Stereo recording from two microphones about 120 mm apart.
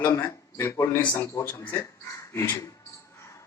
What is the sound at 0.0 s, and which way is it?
Speech, 20° left (ahead or behind).